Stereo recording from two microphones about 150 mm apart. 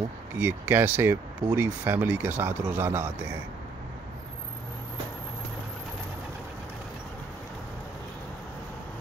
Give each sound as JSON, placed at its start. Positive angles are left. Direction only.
{"t": 0.4, "sound": "speech", "side_deg": -15}